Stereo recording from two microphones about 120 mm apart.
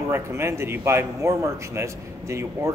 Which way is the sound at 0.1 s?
20° right (ahead or behind).